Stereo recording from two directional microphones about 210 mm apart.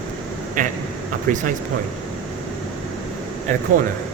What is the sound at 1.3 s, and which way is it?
Speech, 35° right (ahead or behind).